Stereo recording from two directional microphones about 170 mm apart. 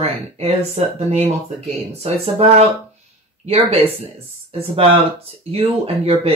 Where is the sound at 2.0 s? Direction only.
35° right (ahead or behind).